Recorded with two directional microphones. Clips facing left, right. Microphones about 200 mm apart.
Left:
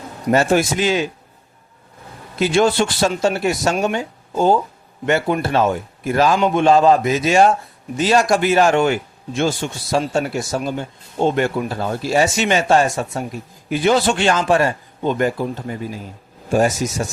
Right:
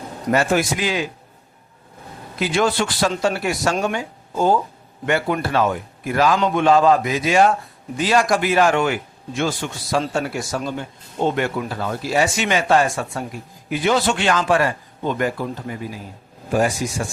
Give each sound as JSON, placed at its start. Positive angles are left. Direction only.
{"t": 0.3, "sound": "speech", "side_deg": 30}
{"t": 2.4, "sound": "speech", "side_deg": 25}
{"t": 16.6, "sound": "speech", "side_deg": 40}